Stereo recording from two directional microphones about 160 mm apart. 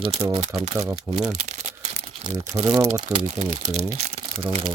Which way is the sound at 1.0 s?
45° right (ahead or behind).